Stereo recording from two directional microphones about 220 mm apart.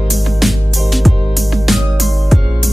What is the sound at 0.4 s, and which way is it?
Music, centre (ahead or behind).